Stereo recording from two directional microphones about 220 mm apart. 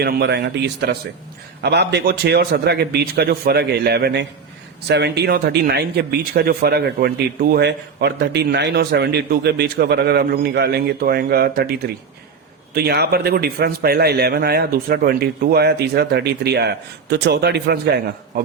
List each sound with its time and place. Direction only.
0.0 s speech: 45° right (ahead or behind)